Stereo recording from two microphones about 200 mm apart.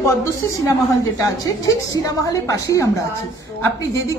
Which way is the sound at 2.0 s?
15° left (ahead or behind).